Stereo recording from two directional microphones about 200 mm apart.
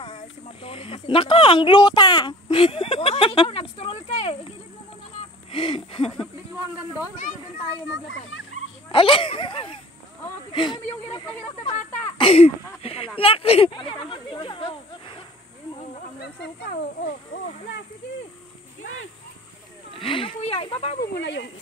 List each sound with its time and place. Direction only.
0.0 s speech: 30° left (ahead or behind)
5.5 s speech: 25° left (ahead or behind)
8.1 s speech: 75° left (ahead or behind)
8.8 s speech: 25° left (ahead or behind)
20.0 s speech: 25° left (ahead or behind)
21.1 s speech: 60° left (ahead or behind)